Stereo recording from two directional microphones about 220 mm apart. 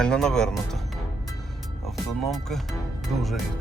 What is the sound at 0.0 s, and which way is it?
Speech, 5° left (ahead or behind).